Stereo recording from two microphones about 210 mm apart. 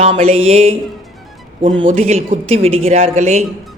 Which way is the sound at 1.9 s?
30° right (ahead or behind).